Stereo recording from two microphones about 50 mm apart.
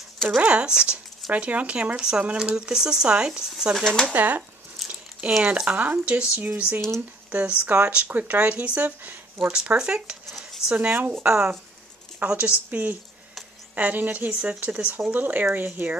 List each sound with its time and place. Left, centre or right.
0.5 s speech: centre
3.7 s speech: centre
4.1 s speech: right
9.5 s speech: centre
10.2 s a sound: centre
10.8 s speech: right
11.2 s speech: right
14.3 s speech: right